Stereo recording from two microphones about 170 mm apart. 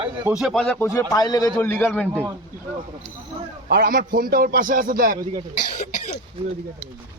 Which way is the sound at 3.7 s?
60° right (ahead or behind).